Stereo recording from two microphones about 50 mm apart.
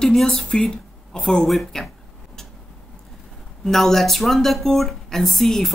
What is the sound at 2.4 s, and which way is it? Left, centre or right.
Tick-tock, centre.